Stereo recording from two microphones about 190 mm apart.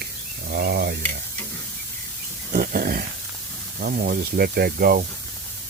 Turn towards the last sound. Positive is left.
turn(degrees=-50)  # may be behind; listen again after turning